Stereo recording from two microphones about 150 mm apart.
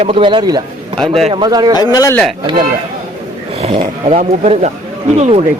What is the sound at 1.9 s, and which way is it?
Speech, 20° left (ahead or behind).